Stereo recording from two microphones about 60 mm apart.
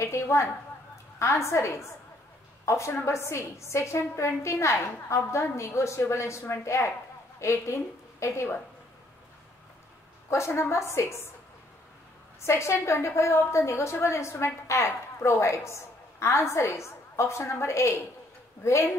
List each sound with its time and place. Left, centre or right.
0.0 s a sound: left
1.2 s a woman's voice: left
10.3 s a woman's voice: left
12.4 s a woman's voice: left